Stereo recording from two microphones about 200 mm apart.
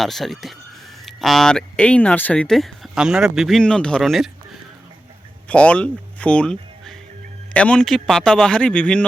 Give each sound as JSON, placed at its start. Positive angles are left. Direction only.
{"t": 0.0, "sound": "speech", "side_deg": 0}
{"t": 5.5, "sound": "speech", "side_deg": 5}